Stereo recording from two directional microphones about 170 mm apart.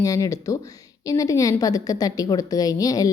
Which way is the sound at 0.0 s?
20° left (ahead or behind).